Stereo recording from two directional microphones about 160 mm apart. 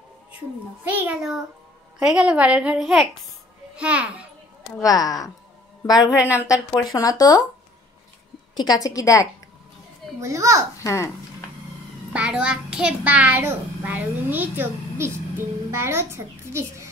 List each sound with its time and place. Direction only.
0.8 s a child's voice: 10° right (ahead or behind)
4.8 s speech: 25° left (ahead or behind)
8.5 s speech: 25° left (ahead or behind)
10.2 s a child's voice: 20° right (ahead or behind)
10.8 s a child's voice: 20° left (ahead or behind)
12.1 s a child's voice: 5° right (ahead or behind)